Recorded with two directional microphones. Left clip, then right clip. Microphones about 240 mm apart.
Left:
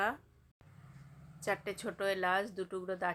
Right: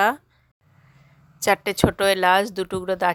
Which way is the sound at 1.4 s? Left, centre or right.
Right.